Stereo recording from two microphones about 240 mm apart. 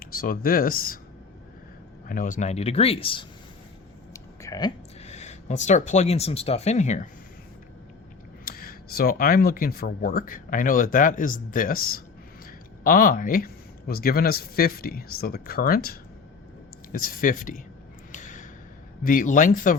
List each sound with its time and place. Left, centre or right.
0.0 s speech: left
2.0 s speech: left
4.1 s a sound: centre
5.0 s speech: left
8.4 s speech: left
18.1 s gasp: left
19.0 s speech: left